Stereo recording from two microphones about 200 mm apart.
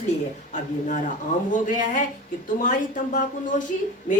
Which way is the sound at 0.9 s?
40° left (ahead or behind).